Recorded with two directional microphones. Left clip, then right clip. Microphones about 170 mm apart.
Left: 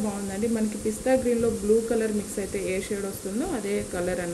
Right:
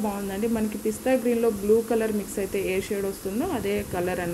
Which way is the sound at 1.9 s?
15° right (ahead or behind).